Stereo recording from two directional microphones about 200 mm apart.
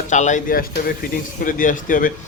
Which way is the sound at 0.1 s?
40° left (ahead or behind).